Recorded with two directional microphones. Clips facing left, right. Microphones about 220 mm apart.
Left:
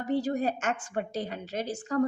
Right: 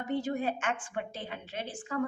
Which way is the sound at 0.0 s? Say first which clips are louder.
Left 4 dB; 35° left (ahead or behind).